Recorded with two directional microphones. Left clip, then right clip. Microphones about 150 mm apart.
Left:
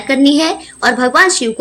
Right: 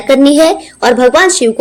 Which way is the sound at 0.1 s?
30° right (ahead or behind).